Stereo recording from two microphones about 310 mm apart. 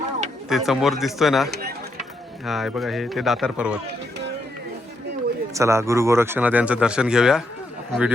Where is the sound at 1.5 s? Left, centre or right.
Right.